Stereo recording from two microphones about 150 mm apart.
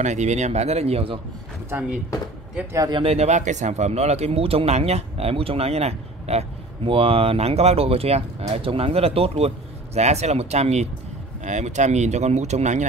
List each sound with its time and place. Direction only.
0.0 s speech: 50° right (ahead or behind)
1.7 s speech: 10° right (ahead or behind)
2.7 s speech: 25° right (ahead or behind)
3.0 s speech: 45° right (ahead or behind)